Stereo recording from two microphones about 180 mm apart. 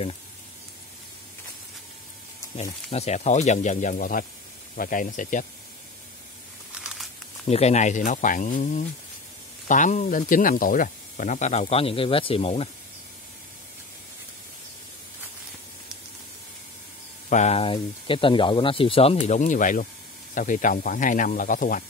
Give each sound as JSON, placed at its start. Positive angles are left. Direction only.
{"t": 2.9, "sound": "speech", "side_deg": 35}
{"t": 6.7, "sound": "crumpling", "side_deg": -5}
{"t": 7.4, "sound": "speech", "side_deg": 35}
{"t": 17.3, "sound": "speech", "side_deg": 40}